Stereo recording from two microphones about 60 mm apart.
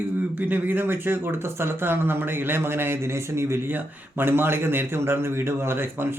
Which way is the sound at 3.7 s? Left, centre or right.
Right.